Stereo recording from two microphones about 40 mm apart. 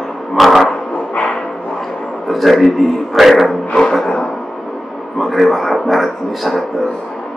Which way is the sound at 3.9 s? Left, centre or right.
Centre.